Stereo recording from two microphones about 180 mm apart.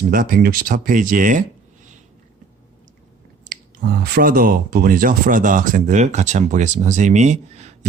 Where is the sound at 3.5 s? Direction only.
50° right (ahead or behind).